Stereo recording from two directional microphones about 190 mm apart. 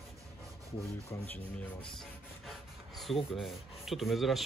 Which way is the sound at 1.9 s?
Centre (ahead or behind).